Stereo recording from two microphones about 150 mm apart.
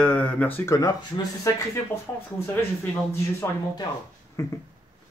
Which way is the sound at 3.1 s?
20° left (ahead or behind).